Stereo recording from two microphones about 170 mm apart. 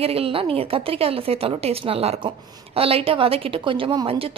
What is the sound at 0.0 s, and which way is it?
A woman's voice, 35° right (ahead or behind).